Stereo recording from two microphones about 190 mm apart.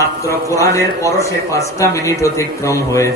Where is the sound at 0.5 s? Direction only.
15° left (ahead or behind).